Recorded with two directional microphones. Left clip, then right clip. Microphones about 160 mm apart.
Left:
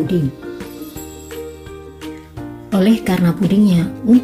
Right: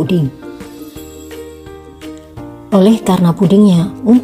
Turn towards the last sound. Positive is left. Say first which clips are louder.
# right 3 dB
turn(degrees=-25)  # may be behind; listen again after turning